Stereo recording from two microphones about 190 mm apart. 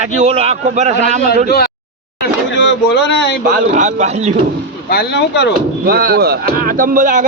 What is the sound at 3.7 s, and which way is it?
Speech, 40° right (ahead or behind).